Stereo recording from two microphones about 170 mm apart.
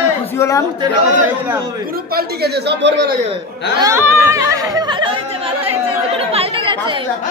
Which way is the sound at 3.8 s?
15° right (ahead or behind).